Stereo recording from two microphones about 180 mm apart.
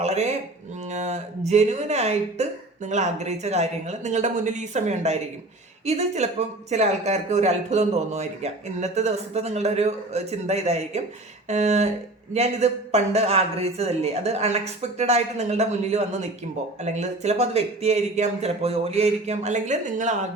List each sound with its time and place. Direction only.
0.0 s speech: 35° right (ahead or behind)